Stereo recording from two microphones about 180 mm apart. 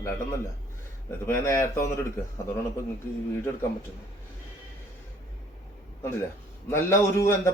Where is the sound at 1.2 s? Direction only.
15° left (ahead or behind).